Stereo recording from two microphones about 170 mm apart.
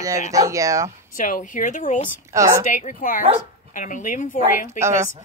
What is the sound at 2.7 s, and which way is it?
Speech, 50° left (ahead or behind).